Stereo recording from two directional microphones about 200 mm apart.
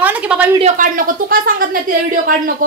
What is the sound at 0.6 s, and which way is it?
A woman's voice, 40° right (ahead or behind).